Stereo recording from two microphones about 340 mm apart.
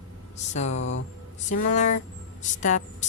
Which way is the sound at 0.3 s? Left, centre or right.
Centre.